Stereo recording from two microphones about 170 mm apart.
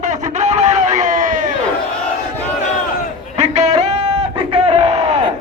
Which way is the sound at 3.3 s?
45° right (ahead or behind).